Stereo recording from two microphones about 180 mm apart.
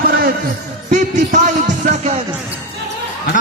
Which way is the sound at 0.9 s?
45° right (ahead or behind).